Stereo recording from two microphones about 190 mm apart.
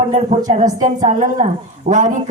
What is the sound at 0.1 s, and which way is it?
A woman's voice, 35° right (ahead or behind).